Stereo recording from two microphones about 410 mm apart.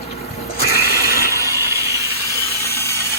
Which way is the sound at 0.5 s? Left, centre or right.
Left.